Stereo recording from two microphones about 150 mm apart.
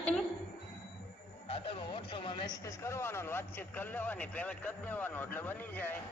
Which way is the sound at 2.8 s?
15° left (ahead or behind).